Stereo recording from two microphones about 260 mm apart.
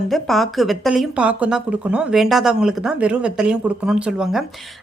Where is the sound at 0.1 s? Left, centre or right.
Centre.